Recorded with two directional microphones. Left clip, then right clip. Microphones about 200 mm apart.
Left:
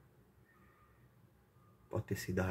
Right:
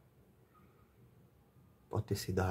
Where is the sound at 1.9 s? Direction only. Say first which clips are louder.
Right 1 dB; 25° right (ahead or behind).